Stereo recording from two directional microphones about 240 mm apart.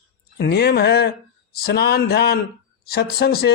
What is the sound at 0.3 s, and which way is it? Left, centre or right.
A man's voice, left.